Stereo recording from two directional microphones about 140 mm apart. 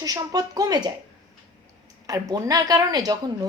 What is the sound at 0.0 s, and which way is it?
Speech, 25° right (ahead or behind).